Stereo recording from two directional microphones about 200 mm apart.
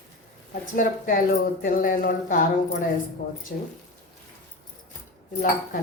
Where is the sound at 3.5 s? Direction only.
50° left (ahead or behind).